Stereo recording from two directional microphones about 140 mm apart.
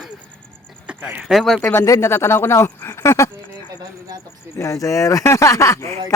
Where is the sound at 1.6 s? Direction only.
20° left (ahead or behind).